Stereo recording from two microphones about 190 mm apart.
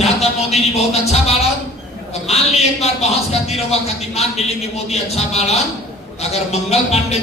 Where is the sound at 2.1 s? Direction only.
35° left (ahead or behind).